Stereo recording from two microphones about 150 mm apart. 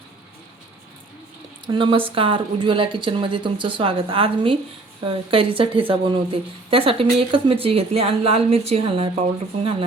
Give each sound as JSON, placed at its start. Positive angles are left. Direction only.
{"t": 1.6, "sound": "speech", "side_deg": -35}